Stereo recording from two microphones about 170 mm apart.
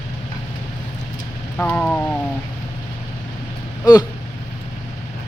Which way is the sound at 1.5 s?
10° left (ahead or behind).